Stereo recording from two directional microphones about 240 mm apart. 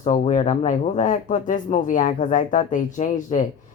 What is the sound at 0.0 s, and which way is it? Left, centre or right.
A man's voice, left.